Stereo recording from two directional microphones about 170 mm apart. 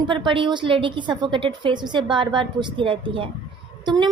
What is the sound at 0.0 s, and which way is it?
A woman's voice, 30° right (ahead or behind).